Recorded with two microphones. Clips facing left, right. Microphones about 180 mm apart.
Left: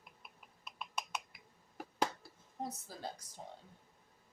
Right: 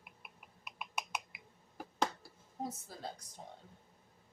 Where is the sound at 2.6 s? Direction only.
Centre (ahead or behind).